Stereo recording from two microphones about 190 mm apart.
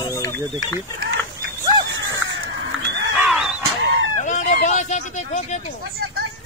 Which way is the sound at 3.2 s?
Centre (ahead or behind).